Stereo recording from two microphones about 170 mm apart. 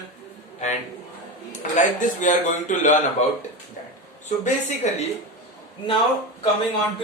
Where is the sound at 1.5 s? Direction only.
45° left (ahead or behind).